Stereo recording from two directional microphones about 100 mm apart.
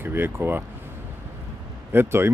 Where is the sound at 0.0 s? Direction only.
20° right (ahead or behind).